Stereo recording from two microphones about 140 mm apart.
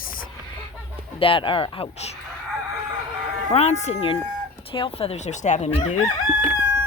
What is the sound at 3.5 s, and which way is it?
Speech, 50° left (ahead or behind).